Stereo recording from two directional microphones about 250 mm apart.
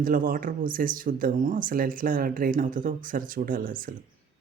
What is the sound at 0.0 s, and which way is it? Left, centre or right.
Speech, right.